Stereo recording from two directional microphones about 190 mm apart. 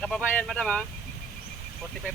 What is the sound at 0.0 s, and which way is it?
Speech, 5° left (ahead or behind).